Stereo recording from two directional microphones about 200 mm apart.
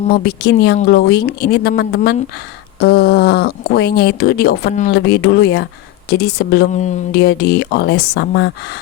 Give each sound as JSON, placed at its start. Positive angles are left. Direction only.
{"t": 0.1, "sound": "speech", "side_deg": 50}